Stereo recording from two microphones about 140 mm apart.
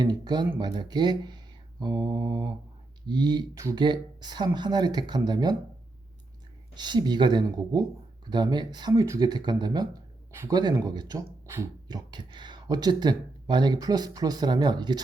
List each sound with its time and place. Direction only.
0.0 s speech: 30° right (ahead or behind)
6.7 s speech: 30° right (ahead or behind)